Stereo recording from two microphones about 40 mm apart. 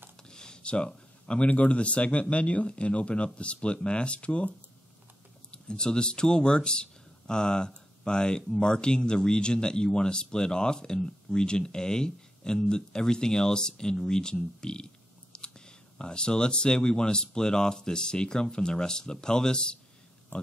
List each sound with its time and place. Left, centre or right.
0.3 s speech: centre
5.5 s speech: left